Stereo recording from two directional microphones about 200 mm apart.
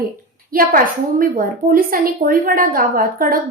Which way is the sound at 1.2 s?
45° right (ahead or behind).